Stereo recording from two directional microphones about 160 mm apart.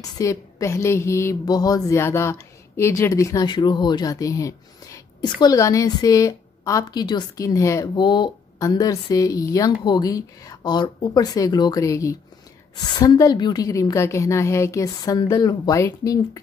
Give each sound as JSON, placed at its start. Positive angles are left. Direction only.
{"t": 0.0, "sound": "speech", "side_deg": 20}